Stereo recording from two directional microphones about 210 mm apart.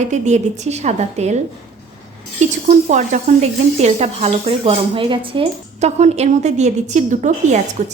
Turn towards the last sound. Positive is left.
turn(degrees=-35)  # may be behind; listen again after turning